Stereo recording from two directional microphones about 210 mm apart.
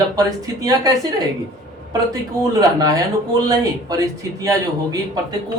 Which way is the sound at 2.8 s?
15° right (ahead or behind).